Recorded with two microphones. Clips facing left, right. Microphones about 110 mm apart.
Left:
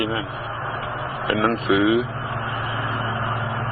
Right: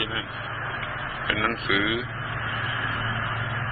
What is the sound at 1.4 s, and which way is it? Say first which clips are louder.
Speech: left 8 dB; 40° left (ahead or behind).